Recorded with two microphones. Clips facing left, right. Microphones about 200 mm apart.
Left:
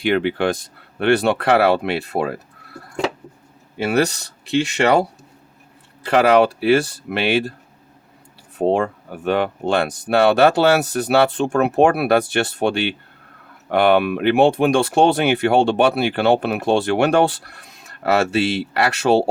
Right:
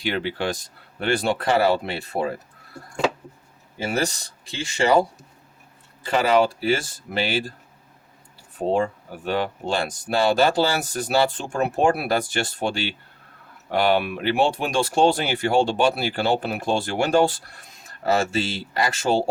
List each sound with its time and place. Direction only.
0.0 s speech: 60° left (ahead or behind)
3.8 s speech: 65° left (ahead or behind)
8.5 s speech: 60° left (ahead or behind)